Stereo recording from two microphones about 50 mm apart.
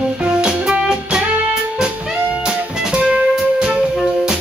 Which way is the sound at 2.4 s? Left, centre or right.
Centre.